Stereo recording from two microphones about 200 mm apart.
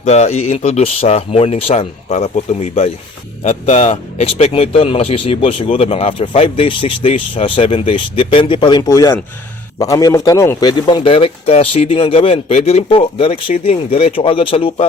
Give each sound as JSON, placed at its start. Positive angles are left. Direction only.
{"t": 0.0, "sound": "speech", "side_deg": 35}